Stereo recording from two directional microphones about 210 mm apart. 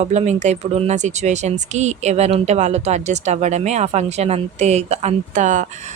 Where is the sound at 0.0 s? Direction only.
35° right (ahead or behind).